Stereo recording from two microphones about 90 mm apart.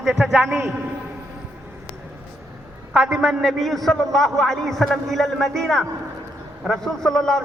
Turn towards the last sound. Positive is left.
turn(degrees=5)  # may be behind; listen again after turning